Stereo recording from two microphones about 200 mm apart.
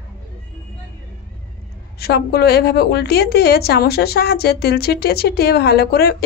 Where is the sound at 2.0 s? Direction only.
50° left (ahead or behind).